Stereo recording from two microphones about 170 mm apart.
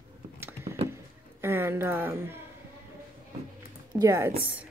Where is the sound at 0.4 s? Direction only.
15° right (ahead or behind).